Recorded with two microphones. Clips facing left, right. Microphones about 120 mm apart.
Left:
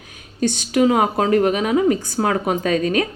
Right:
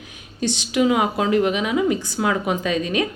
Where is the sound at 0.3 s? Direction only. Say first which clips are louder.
Left 3 dB; 45° left (ahead or behind).